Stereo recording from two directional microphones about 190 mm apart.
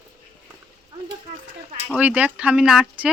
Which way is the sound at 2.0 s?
5° right (ahead or behind).